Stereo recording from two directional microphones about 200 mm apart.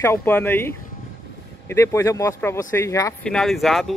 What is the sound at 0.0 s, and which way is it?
Speech, 10° left (ahead or behind).